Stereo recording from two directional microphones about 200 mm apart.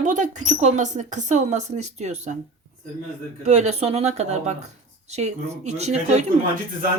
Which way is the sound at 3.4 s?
35° right (ahead or behind).